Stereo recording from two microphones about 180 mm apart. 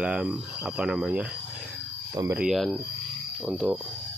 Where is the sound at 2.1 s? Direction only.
15° right (ahead or behind).